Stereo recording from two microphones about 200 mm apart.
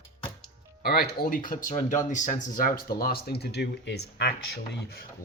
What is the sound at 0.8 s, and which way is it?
Speech, 50° left (ahead or behind).